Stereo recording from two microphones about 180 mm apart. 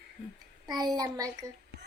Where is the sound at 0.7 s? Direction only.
20° right (ahead or behind).